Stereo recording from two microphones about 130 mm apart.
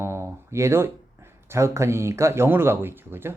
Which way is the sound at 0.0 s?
20° right (ahead or behind).